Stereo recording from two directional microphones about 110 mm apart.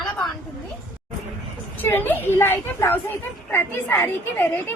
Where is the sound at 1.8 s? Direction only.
20° left (ahead or behind).